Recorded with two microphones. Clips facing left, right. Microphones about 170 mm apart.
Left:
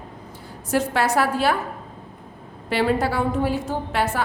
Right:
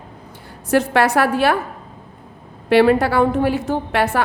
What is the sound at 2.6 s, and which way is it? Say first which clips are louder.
A woman's voice: right 8 dB; 70° right (ahead or behind).